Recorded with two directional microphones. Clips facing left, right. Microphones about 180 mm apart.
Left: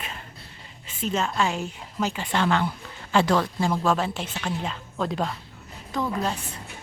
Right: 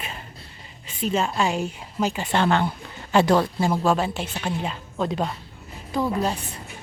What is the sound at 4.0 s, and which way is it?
Speech, 5° right (ahead or behind).